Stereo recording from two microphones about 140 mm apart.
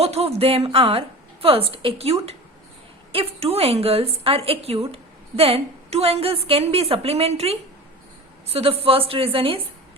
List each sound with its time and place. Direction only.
0.0 s a woman's voice: 45° right (ahead or behind)